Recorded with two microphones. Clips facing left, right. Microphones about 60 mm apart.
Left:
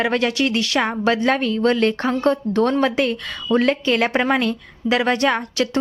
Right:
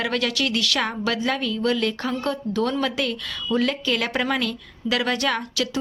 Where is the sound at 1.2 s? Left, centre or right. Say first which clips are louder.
Left 6 dB; left.